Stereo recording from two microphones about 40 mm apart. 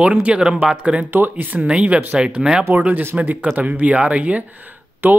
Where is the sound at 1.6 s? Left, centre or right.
Right.